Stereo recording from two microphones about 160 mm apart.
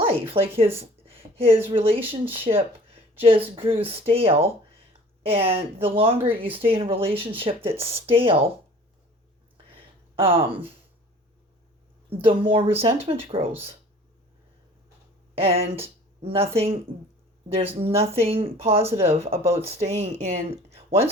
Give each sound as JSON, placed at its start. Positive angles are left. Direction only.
{"t": 0.0, "sound": "speech", "side_deg": -35}
{"t": 0.8, "sound": "a sound", "side_deg": -35}
{"t": 1.7, "sound": "speech", "side_deg": -35}
{"t": 9.7, "sound": "a sound", "side_deg": -35}
{"t": 12.0, "sound": "speech", "side_deg": -35}
{"t": 15.4, "sound": "speech", "side_deg": -40}